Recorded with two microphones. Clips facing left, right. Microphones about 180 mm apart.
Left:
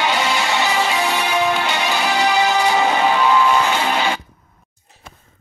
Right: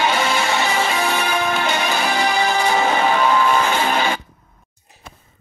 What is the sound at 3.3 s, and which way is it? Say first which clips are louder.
Music: left 1 dB; 50° right (ahead or behind).